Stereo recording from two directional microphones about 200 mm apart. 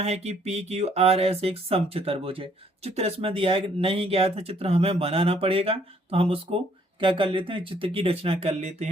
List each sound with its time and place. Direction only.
0.0 s speech: 30° right (ahead or behind)